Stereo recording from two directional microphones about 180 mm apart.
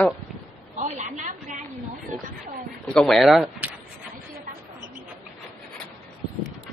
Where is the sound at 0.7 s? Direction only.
45° right (ahead or behind).